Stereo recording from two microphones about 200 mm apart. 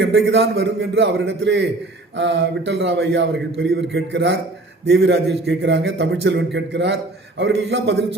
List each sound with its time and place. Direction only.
0.0 s a man's voice: 55° right (ahead or behind)